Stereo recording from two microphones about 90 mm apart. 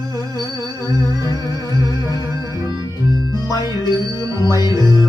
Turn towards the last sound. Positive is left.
turn(degrees=45)  # may be behind; listen again after turning